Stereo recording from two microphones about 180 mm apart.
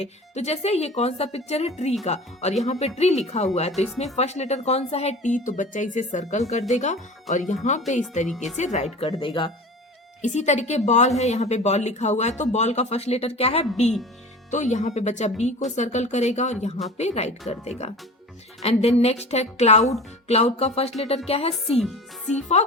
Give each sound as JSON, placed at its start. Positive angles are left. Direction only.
{"t": 0.0, "sound": "speech", "side_deg": 35}
{"t": 9.1, "sound": "speech", "side_deg": 25}
{"t": 10.2, "sound": "speech", "side_deg": 40}
{"t": 21.5, "sound": "speech", "side_deg": 0}
{"t": 22.3, "sound": "speech", "side_deg": 40}